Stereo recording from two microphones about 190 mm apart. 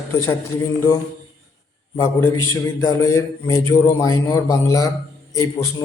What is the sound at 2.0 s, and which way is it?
A man's voice, 15° left (ahead or behind).